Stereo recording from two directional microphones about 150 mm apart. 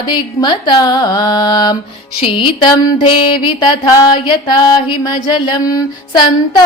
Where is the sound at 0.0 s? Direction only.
30° left (ahead or behind).